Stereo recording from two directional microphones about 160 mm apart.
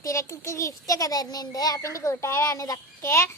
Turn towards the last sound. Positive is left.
turn(degrees=15)  # may be behind; listen again after turning